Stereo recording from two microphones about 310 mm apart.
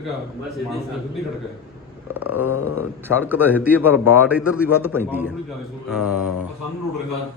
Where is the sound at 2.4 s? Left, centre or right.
Left.